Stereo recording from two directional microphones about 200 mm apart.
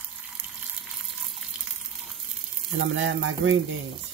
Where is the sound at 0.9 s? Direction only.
Centre (ahead or behind).